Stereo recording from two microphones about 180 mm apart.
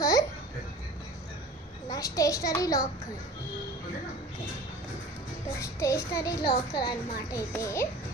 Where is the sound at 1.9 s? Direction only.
20° left (ahead or behind).